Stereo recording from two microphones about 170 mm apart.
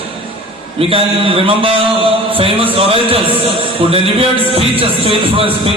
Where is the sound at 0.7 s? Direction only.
35° right (ahead or behind).